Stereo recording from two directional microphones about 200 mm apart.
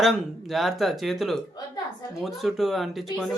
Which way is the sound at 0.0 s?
Centre (ahead or behind).